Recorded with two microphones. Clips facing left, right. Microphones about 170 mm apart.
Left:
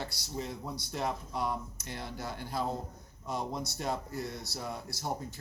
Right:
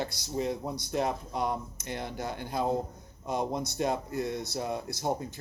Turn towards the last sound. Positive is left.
turn(degrees=-20)  # may be behind; listen again after turning